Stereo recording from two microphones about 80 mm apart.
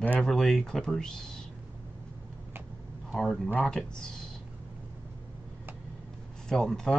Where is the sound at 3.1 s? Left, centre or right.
Centre.